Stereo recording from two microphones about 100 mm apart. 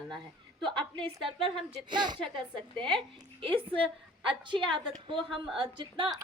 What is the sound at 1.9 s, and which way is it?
Speech, 50° right (ahead or behind).